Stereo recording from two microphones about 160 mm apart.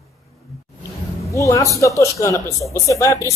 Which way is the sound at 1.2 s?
20° left (ahead or behind).